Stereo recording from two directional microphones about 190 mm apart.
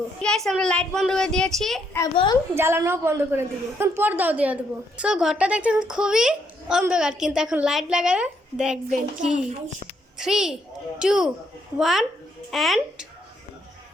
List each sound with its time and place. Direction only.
0.2 s a child's voice: 5° left (ahead or behind)
2.1 s a woman's voice: 25° left (ahead or behind)
2.6 s a woman's voice: 15° right (ahead or behind)